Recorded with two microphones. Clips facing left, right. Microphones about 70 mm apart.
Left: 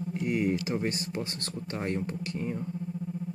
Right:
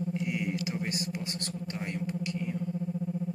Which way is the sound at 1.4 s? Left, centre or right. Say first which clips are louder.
Left 1 dB; left.